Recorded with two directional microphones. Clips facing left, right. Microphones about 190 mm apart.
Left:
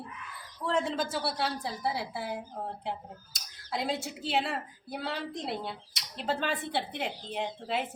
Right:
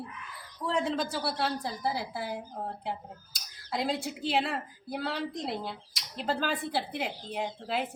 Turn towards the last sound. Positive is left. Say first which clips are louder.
# even
turn(degrees=0)  # may be behind; listen again after turning